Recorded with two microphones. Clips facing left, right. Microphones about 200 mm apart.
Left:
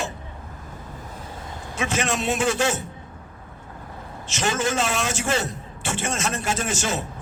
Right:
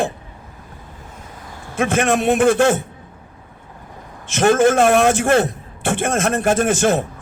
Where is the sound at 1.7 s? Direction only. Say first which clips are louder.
Right 8 dB; 55° right (ahead or behind).